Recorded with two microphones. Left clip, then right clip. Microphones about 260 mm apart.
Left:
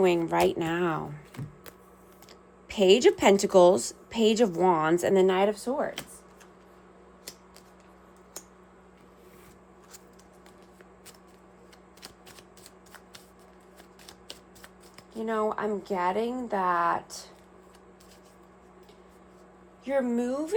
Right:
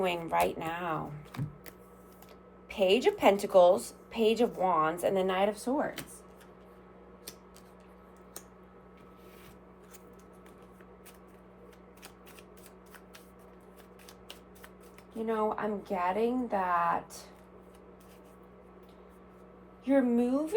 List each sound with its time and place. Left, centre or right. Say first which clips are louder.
0.0 s a woman's voice: left 5 dB; left
2.6 s a woman's voice: left 6 dB; left
14.1 s shuffling cards: left 5 dB; left
15.1 s a woman's voice: left 3 dB; left
19.8 s a woman's voice: even; left